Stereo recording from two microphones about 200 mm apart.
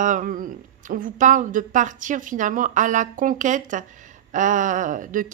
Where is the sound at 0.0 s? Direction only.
40° right (ahead or behind).